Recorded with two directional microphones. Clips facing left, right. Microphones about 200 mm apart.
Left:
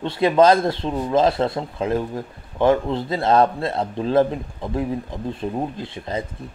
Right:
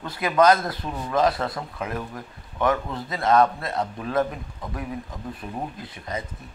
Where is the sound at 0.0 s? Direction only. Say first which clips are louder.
Left 4 dB; 25° left (ahead or behind).